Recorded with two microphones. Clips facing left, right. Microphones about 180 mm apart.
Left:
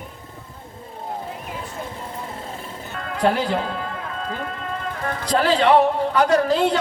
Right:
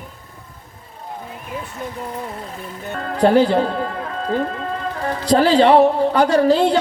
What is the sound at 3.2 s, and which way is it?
A woman's voice, 35° right (ahead or behind).